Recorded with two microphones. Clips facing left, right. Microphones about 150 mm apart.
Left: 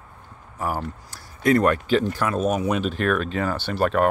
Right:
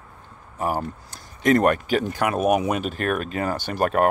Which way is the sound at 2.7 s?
50° right (ahead or behind).